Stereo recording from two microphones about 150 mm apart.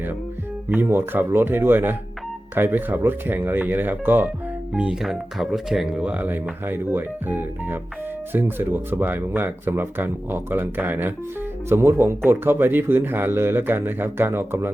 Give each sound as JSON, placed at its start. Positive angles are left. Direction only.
{"t": 0.7, "sound": "speech", "side_deg": -15}